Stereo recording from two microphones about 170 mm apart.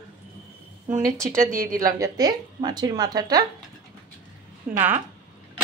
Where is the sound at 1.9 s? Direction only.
20° right (ahead or behind).